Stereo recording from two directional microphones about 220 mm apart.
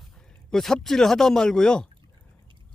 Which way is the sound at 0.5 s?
Centre (ahead or behind).